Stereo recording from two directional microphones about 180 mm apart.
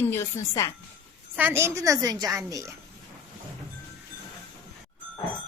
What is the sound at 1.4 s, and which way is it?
A woman's voice, 10° right (ahead or behind).